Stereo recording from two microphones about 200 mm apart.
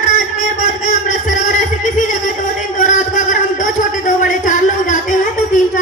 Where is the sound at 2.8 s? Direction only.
40° left (ahead or behind).